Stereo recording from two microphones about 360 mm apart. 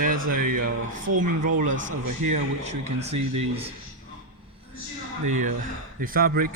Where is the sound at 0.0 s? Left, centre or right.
Right.